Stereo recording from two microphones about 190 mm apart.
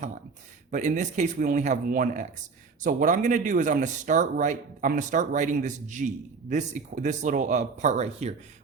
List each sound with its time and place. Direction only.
0.7 s speech: 40° right (ahead or behind)